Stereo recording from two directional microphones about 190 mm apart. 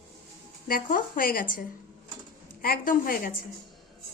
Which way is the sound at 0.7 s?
45° left (ahead or behind).